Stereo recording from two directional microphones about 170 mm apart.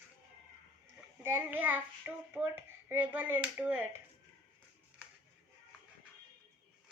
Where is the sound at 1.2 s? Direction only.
10° right (ahead or behind).